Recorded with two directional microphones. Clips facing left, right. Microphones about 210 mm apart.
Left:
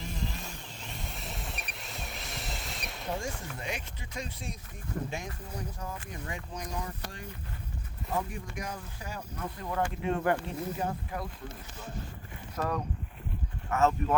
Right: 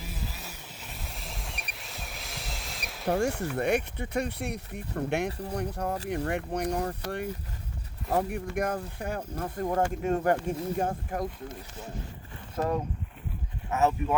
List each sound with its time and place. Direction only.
0.0 s vehicle: 5° right (ahead or behind)
3.1 s speech: 65° right (ahead or behind)
9.3 s speech: 40° right (ahead or behind)
12.5 s speech: 25° right (ahead or behind)